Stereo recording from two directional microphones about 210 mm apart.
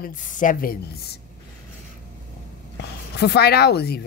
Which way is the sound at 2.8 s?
55° left (ahead or behind).